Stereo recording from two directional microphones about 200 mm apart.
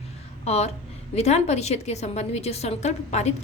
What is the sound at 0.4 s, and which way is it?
A woman's voice, 35° left (ahead or behind).